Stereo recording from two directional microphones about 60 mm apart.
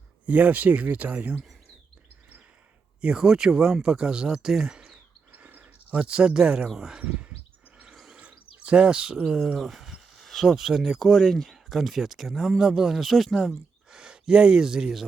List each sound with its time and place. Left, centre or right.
0.3 s speech: right
3.0 s speech: centre
5.3 s a sound: right
6.7 s speech: centre
7.0 s speech: centre
7.9 s chirp: centre
8.2 s speech: right; by 13.5 s centre
13.9 s speech: centre